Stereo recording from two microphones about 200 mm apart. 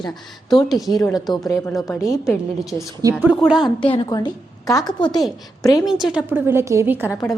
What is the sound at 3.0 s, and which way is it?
Speech, 10° right (ahead or behind).